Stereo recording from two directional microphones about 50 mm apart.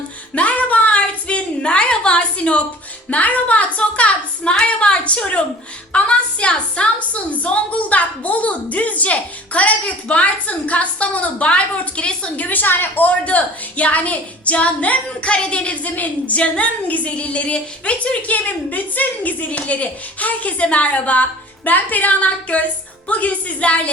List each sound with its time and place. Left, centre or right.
0.3 s a sound: left
3.1 s a woman's voice: left
12.5 s a woman's voice: left